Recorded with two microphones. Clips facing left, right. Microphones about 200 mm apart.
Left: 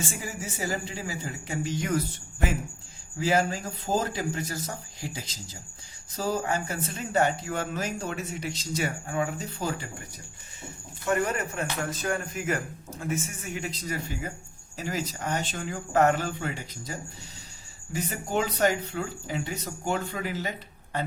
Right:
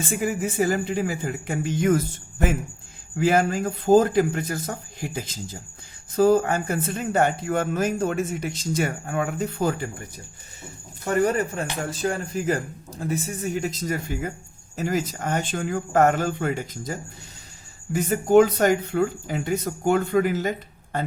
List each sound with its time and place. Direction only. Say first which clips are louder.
0.1 s speech: right 11 dB; 55° right (ahead or behind)
3.2 s speech: right 5 dB; 55° right (ahead or behind)
11.0 s a man's voice: right 5 dB; 35° right (ahead or behind)